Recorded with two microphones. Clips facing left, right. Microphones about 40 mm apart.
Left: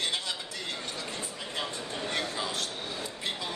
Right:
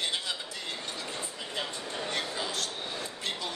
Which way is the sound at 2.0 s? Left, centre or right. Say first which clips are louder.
Left 2 dB; left.